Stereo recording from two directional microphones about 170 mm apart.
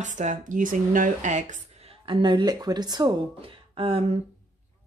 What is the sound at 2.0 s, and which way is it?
Speech, 25° right (ahead or behind).